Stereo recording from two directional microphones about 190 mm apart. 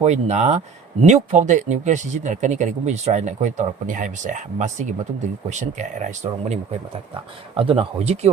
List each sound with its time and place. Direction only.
0.0 s speech: 35° right (ahead or behind)